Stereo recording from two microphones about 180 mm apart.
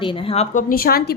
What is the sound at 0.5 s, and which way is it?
Speech, 55° left (ahead or behind).